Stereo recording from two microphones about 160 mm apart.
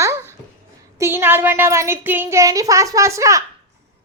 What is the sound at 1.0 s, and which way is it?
Child singing, 15° right (ahead or behind).